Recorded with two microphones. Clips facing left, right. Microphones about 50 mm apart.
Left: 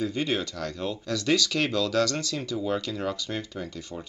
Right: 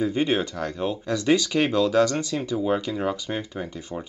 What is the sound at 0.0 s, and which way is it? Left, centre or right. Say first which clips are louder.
Speech: right 5 dB; right.